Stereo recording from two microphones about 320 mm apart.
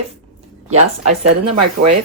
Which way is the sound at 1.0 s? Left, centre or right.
Right.